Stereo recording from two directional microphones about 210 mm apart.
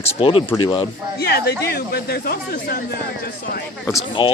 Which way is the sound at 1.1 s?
50° left (ahead or behind).